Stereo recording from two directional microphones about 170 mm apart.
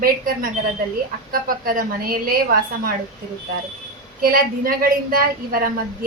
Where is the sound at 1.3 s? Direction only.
55° right (ahead or behind).